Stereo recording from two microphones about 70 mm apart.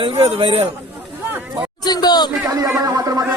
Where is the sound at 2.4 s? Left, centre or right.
Right.